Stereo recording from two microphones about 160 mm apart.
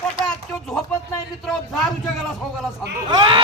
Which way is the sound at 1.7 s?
Centre (ahead or behind).